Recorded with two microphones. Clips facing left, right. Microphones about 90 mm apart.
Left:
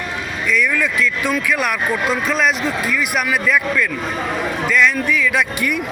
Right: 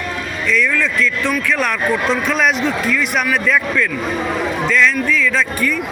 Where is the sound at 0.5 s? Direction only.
15° left (ahead or behind).